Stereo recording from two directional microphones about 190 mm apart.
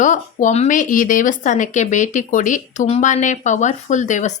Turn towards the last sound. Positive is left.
turn(degrees=40)  # may be behind; listen again after turning